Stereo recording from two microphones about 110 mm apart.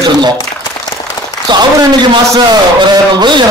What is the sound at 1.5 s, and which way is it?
Speech, 45° right (ahead or behind).